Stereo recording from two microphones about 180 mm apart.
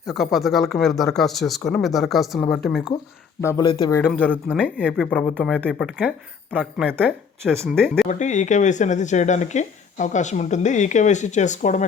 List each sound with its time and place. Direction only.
0.0 s speech: centre (ahead or behind)
3.4 s speech: 15° left (ahead or behind)
4.2 s speech: 10° left (ahead or behind); by 7.1 s 10° right (ahead or behind)
7.7 s speech: centre (ahead or behind)
8.0 s speech: 40° left (ahead or behind)